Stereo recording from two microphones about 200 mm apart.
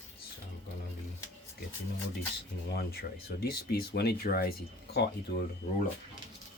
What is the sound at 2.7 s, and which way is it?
Speech, 50° left (ahead or behind).